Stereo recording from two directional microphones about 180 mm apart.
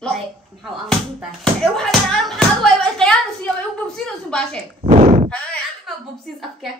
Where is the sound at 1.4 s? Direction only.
5° left (ahead or behind).